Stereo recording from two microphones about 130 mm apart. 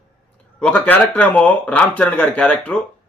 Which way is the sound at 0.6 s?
15° left (ahead or behind).